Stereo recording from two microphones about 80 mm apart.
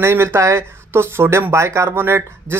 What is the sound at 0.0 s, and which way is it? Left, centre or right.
Speech, right.